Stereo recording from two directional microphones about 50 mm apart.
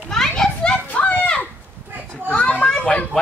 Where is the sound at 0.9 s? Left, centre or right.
Left.